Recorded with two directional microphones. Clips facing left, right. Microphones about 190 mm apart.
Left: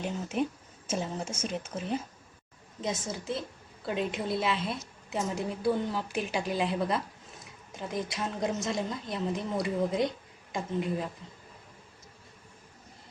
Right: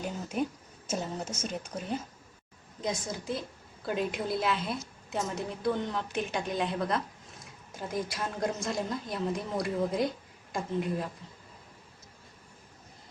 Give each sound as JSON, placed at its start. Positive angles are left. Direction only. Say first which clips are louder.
{"t": 0.0, "sound": "speech", "louder": "left 2 dB", "side_deg": -5}
{"t": 1.1, "sound": "speech", "louder": "left 1 dB", "side_deg": 10}
{"t": 2.8, "sound": "a woman's voice", "louder": "even", "side_deg": 5}